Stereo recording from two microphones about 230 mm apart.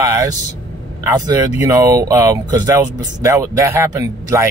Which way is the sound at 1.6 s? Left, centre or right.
Centre.